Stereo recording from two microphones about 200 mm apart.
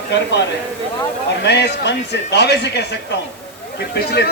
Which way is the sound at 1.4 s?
55° left (ahead or behind).